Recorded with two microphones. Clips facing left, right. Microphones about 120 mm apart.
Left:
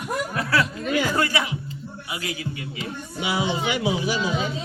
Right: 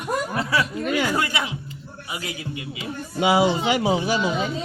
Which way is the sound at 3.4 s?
35° right (ahead or behind).